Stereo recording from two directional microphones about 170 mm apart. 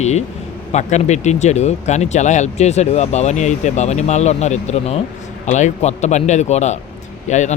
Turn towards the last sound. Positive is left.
turn(degrees=45)  # may be behind; listen again after turning